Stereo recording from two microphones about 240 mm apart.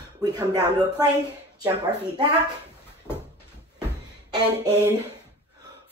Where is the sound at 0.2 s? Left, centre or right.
Centre.